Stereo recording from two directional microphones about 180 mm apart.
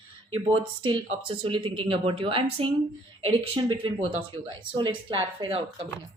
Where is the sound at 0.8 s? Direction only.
25° right (ahead or behind).